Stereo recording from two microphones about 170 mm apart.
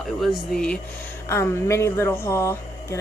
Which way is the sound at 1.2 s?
15° left (ahead or behind).